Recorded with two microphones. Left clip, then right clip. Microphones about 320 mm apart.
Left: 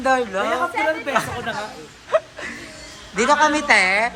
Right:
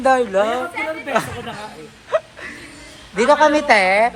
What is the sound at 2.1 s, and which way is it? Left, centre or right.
Dog, centre.